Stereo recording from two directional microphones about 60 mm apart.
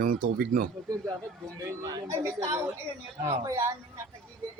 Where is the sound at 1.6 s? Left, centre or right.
Right.